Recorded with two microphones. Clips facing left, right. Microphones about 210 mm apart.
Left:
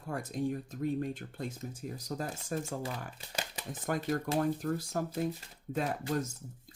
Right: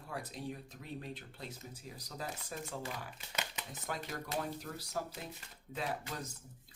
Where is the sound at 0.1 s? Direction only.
45° left (ahead or behind).